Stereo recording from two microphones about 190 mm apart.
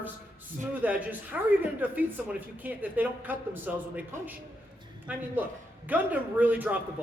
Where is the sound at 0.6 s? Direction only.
10° right (ahead or behind).